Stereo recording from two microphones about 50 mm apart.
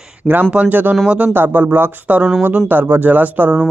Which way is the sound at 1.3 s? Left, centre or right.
Right.